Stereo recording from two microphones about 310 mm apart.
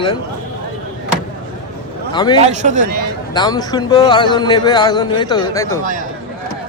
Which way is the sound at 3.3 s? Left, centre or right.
Centre.